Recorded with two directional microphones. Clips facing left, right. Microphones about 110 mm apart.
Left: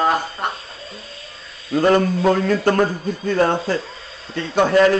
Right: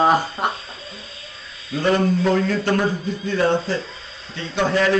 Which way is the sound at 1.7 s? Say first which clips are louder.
Left 3 dB; 45° left (ahead or behind).